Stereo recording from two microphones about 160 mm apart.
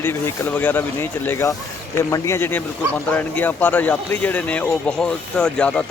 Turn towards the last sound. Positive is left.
turn(degrees=5)  # may be behind; listen again after turning